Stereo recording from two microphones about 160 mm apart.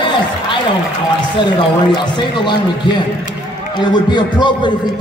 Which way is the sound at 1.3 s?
30° left (ahead or behind).